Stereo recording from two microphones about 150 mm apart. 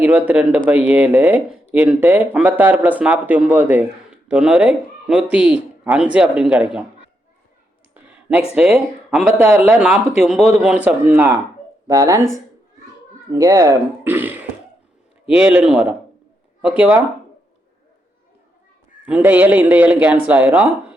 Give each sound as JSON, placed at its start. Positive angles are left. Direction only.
{"t": 0.0, "sound": "speech", "side_deg": -10}
{"t": 8.0, "sound": "a sound", "side_deg": -5}
{"t": 8.5, "sound": "speech", "side_deg": -5}
{"t": 11.9, "sound": "speech", "side_deg": -20}
{"t": 13.3, "sound": "speech", "side_deg": -20}
{"t": 19.0, "sound": "speech", "side_deg": -10}